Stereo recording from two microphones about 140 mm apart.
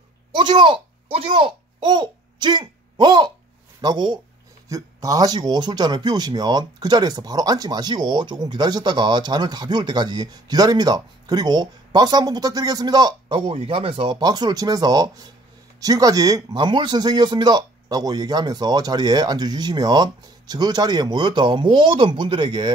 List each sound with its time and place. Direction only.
0.4 s speech: 35° right (ahead or behind)
13.5 s speech: 40° right (ahead or behind)